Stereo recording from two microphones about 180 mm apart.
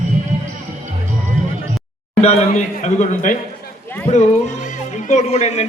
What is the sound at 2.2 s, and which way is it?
A man's voice, 35° left (ahead or behind).